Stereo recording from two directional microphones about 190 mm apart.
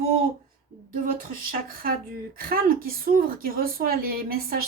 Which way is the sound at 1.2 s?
45° right (ahead or behind).